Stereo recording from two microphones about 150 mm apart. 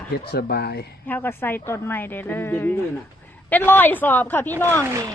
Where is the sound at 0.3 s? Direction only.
90° left.